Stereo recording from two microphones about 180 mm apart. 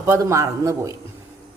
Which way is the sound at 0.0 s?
15° right (ahead or behind).